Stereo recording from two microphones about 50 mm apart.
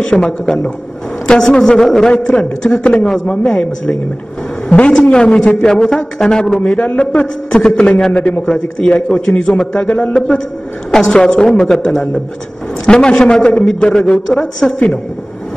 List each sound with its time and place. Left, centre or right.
0.0 s a man's voice: centre
4.6 s a man's voice: left
8.1 s a man's voice: left